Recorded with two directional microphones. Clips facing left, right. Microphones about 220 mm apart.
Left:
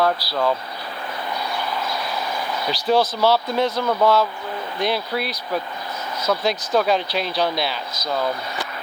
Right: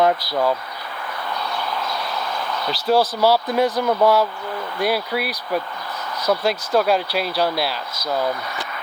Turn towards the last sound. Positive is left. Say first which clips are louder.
# right 1 dB
turn(degrees=-5)  # may be behind; listen again after turning